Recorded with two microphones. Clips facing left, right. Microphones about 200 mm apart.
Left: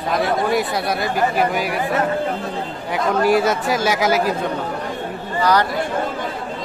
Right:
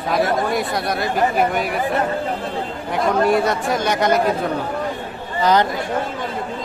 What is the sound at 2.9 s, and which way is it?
Speech, centre (ahead or behind).